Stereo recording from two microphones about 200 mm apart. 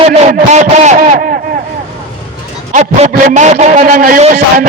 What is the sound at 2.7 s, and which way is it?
A man's voice, 40° right (ahead or behind).